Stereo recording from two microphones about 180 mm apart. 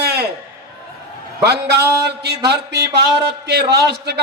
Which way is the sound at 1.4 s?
65° right (ahead or behind).